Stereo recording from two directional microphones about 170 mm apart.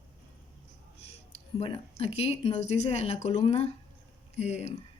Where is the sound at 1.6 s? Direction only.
35° left (ahead or behind).